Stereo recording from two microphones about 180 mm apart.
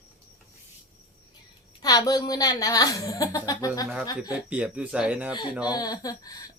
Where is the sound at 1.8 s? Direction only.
20° left (ahead or behind).